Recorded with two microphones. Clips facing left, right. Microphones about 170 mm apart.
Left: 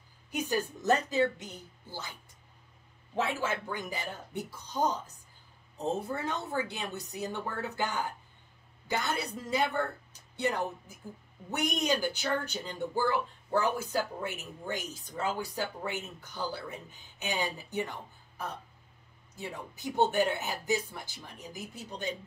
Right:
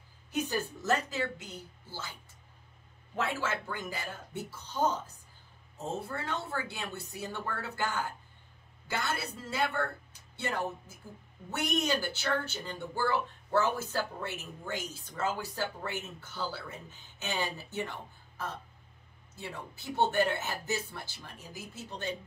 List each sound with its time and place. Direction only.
0.3 s speech: 15° left (ahead or behind)
3.3 s speech: 15° left (ahead or behind)
5.9 s speech: 20° left (ahead or behind)
19.3 s speech: 15° left (ahead or behind)